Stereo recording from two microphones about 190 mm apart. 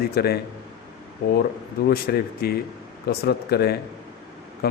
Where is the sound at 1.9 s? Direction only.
55° left (ahead or behind).